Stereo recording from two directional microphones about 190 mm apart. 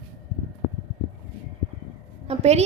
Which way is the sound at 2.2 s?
35° right (ahead or behind).